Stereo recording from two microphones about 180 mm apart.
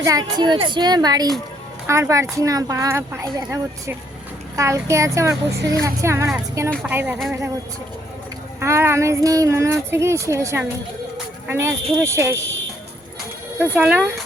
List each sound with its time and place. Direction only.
0.0 s a woman's voice: 20° right (ahead or behind)
8.6 s speech: 15° right (ahead or behind)
13.6 s speech: 10° right (ahead or behind)